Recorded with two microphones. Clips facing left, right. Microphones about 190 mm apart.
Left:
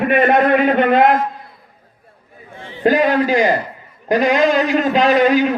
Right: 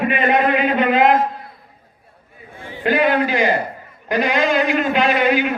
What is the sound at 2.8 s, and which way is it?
A man's voice, 40° left (ahead or behind).